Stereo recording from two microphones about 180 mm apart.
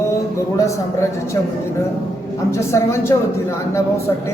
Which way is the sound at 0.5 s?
15° left (ahead or behind).